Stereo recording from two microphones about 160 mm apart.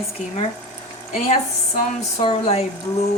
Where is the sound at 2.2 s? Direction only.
40° left (ahead or behind).